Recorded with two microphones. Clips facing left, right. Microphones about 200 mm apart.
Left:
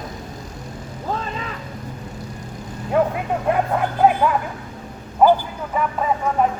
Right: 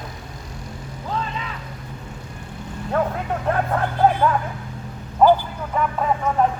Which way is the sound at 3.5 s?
10° left (ahead or behind).